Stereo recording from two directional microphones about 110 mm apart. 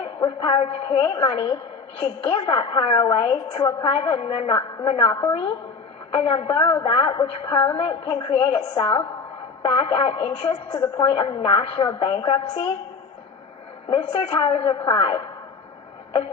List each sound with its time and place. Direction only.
0.0 s a woman's voice: 45° left (ahead or behind)
5.1 s a woman's voice: 35° left (ahead or behind)
6.1 s a woman's voice: 55° left (ahead or behind)
13.9 s a woman's voice: 55° left (ahead or behind)